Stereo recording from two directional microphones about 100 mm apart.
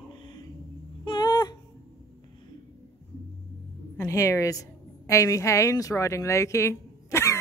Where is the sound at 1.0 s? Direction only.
50° left (ahead or behind).